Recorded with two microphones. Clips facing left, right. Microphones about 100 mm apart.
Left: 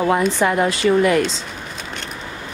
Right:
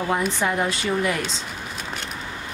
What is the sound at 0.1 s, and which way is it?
Speech, 90° left.